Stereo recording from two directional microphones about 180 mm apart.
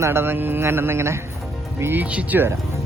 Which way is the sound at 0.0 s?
15° right (ahead or behind).